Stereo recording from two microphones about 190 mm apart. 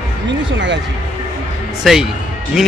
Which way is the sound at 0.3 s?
70° right (ahead or behind).